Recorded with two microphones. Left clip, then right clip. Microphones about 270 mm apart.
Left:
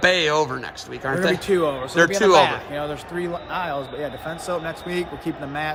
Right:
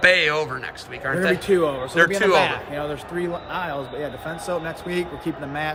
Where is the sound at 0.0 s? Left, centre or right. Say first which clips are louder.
Right 1 dB; centre.